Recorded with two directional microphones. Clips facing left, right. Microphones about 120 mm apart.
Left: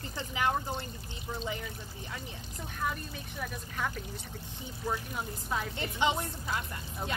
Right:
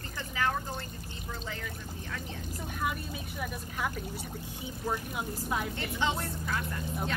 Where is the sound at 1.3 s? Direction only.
15° left (ahead or behind).